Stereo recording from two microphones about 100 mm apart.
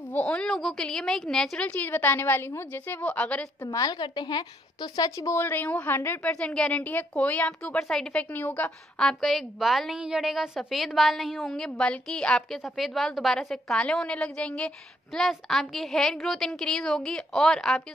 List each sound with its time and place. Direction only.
0.1 s a woman's voice: 10° left (ahead or behind)
3.6 s a woman's voice: 40° left (ahead or behind)
4.9 s speech: 35° left (ahead or behind)
5.4 s a woman's voice: 20° left (ahead or behind)